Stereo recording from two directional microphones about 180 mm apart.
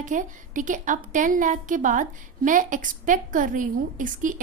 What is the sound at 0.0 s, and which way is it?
A woman's voice, 45° right (ahead or behind).